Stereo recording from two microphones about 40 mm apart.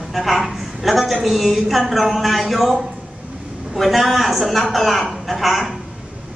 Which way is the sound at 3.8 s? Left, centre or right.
Centre.